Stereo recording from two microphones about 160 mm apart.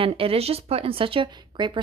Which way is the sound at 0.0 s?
35° right (ahead or behind).